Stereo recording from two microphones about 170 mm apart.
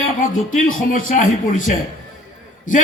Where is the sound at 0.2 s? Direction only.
50° left (ahead or behind).